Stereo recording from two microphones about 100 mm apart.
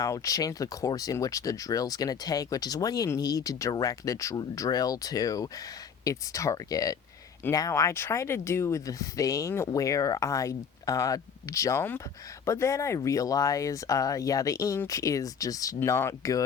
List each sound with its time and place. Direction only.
0.0 s speech: 35° left (ahead or behind)
7.4 s speech: 20° left (ahead or behind)